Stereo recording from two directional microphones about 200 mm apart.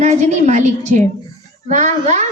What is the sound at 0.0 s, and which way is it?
Speech, 35° right (ahead or behind).